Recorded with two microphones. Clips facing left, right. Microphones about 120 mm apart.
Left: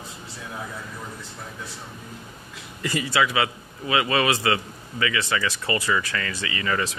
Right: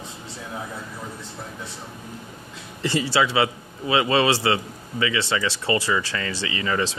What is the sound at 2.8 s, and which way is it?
A man's voice, 25° right (ahead or behind).